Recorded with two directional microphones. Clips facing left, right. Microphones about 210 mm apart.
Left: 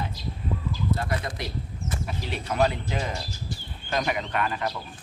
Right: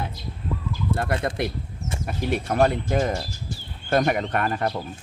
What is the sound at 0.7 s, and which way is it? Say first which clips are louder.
Speech: right 3 dB; 55° right (ahead or behind).